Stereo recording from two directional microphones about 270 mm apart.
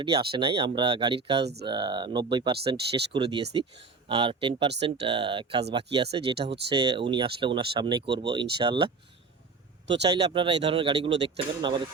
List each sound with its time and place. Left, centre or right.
0.0 s speech: centre
9.9 s speech: right